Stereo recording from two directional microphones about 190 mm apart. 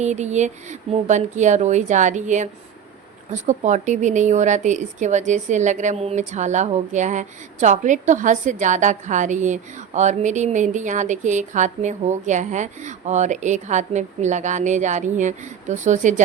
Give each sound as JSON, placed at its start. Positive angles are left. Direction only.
{"t": 0.0, "sound": "speech", "side_deg": -35}